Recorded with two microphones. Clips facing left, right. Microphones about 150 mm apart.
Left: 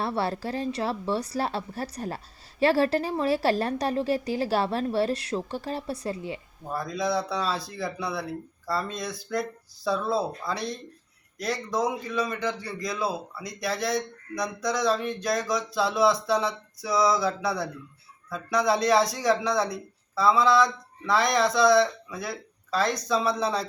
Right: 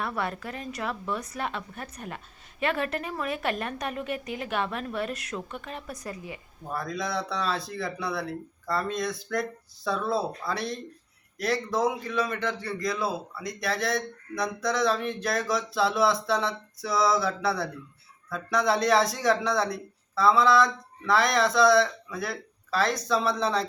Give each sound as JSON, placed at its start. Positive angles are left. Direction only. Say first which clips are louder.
{"t": 0.0, "sound": "a woman's voice", "louder": "left 4 dB", "side_deg": 30}
{"t": 6.7, "sound": "a man's voice", "louder": "left 3 dB", "side_deg": 0}